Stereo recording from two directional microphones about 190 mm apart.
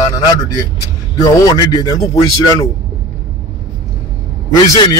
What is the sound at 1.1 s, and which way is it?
A man's voice, 20° left (ahead or behind).